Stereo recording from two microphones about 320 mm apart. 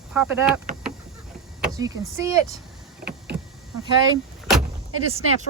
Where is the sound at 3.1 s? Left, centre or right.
Right.